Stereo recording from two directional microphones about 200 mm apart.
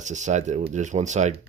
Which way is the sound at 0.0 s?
35° right (ahead or behind).